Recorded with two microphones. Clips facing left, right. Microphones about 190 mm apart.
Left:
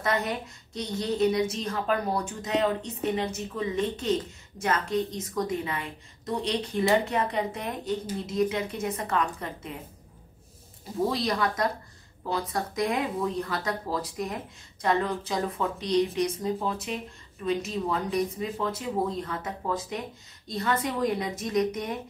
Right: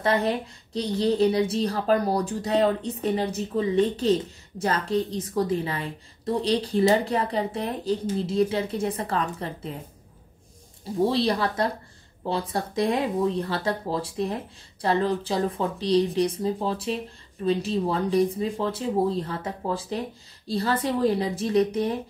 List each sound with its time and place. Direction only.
0.0 s a woman's voice: 30° right (ahead or behind)
11.0 s a woman's voice: 30° right (ahead or behind)